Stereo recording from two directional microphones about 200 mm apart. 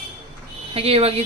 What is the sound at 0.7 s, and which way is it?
Speech, 30° right (ahead or behind).